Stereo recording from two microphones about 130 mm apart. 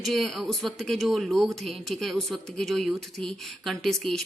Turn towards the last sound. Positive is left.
turn(degrees=5)  # may be behind; listen again after turning